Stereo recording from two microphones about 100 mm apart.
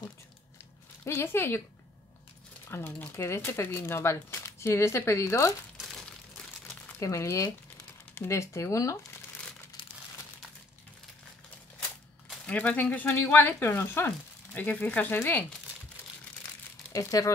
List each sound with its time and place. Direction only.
1.0 s speech: 25° left (ahead or behind)
2.7 s speech: 25° left (ahead or behind)
7.0 s speech: 30° left (ahead or behind)
12.4 s speech: 15° left (ahead or behind)
16.9 s speech: 35° left (ahead or behind)